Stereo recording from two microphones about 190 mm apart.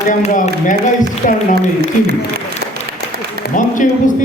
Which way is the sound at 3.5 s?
45° left (ahead or behind).